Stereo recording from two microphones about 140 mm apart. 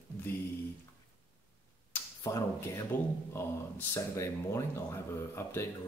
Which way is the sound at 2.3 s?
25° left (ahead or behind).